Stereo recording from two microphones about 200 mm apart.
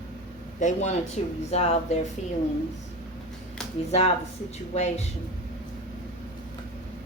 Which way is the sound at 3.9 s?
30° left (ahead or behind).